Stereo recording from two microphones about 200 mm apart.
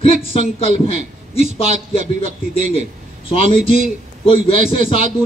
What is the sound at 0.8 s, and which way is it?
Speech, 30° left (ahead or behind).